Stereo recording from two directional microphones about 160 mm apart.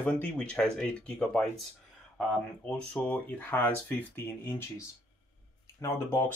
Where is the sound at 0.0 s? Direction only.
5° left (ahead or behind).